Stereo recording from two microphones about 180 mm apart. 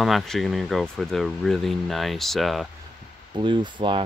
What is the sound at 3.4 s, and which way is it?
Speech, 25° right (ahead or behind).